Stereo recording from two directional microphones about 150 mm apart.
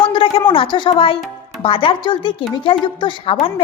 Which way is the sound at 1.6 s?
35° left (ahead or behind).